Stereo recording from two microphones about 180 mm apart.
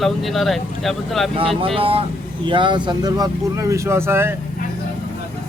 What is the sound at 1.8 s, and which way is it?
Speech, 30° right (ahead or behind).